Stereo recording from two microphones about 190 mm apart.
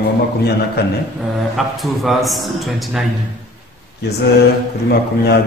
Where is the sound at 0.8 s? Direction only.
60° left (ahead or behind).